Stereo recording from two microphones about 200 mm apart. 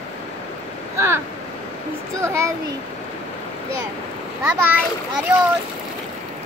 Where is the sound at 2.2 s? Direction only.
15° right (ahead or behind).